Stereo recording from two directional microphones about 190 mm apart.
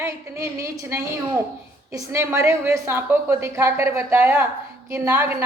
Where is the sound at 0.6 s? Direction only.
15° right (ahead or behind).